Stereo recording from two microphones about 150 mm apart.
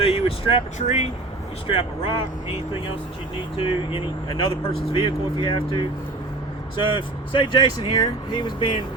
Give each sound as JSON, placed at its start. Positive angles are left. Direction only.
{"t": 0.0, "sound": "speech", "side_deg": 40}
{"t": 1.6, "sound": "speech", "side_deg": 35}
{"t": 3.6, "sound": "speech", "side_deg": 35}